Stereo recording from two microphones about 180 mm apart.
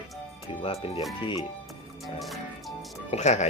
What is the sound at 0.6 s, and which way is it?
Speech, 30° left (ahead or behind).